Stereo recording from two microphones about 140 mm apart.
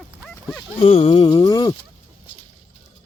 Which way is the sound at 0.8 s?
40° left (ahead or behind).